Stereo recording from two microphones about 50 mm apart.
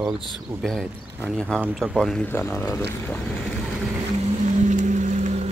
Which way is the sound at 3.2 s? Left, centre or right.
Centre.